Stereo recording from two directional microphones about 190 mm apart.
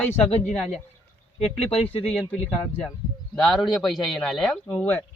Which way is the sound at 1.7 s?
30° left (ahead or behind).